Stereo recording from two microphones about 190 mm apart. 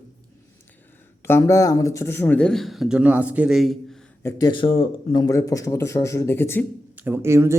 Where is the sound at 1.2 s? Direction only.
15° left (ahead or behind); by 3.7 s centre (ahead or behind).